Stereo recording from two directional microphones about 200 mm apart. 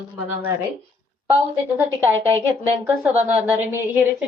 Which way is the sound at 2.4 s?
10° right (ahead or behind).